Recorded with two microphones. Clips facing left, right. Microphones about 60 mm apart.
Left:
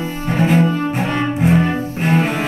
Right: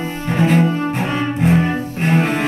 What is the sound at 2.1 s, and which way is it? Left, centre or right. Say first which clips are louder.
Cello: even; centre.